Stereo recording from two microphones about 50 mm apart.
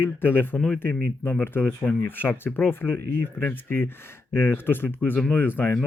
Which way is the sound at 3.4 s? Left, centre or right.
Left.